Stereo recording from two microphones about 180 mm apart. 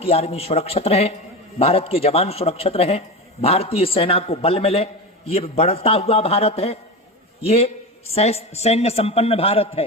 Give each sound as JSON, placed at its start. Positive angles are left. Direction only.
{"t": 0.0, "sound": "a man's voice", "side_deg": 35}